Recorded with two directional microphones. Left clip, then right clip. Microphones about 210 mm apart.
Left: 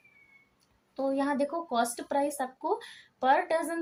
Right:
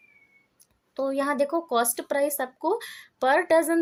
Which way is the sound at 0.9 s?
55° right (ahead or behind).